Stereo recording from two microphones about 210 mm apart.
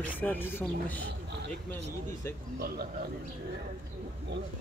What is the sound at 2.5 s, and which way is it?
Speech, 45° right (ahead or behind).